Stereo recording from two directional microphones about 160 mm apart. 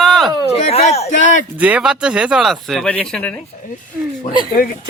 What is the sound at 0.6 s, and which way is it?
Speech, 40° left (ahead or behind).